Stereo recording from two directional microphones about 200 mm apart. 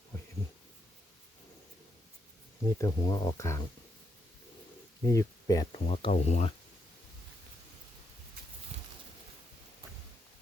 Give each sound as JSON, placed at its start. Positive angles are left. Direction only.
{"t": 2.6, "sound": "speech", "side_deg": 15}
{"t": 5.0, "sound": "speech", "side_deg": 15}
{"t": 5.7, "sound": "speech", "side_deg": 30}